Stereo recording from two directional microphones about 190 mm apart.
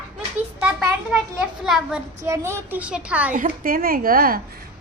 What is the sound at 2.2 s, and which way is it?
A child's voice, 15° right (ahead or behind).